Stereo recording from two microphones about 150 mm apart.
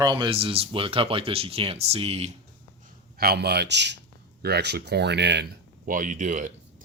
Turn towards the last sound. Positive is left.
turn(degrees=-55)  # may be behind; listen again after turning